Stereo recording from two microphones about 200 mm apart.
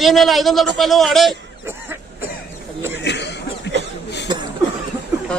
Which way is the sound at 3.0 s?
60° left (ahead or behind).